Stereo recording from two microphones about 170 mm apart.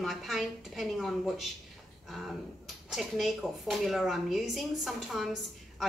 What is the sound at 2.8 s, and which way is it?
A woman's voice, centre (ahead or behind).